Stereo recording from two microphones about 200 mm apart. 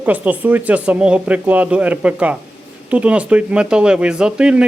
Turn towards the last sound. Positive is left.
turn(degrees=-5)  # may be behind; listen again after turning